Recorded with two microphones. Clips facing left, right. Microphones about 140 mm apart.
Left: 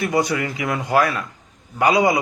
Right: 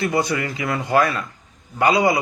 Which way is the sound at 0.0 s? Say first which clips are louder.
Left 1 dB; 15° left (ahead or behind).